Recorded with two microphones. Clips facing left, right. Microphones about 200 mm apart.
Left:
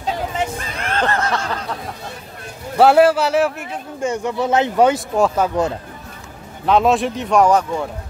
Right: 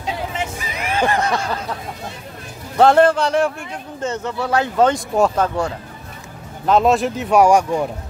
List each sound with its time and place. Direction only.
0.6 s snicker: 10° right (ahead or behind)
2.8 s speech: 5° left (ahead or behind)
4.8 s speech: centre (ahead or behind)
6.6 s speech: centre (ahead or behind)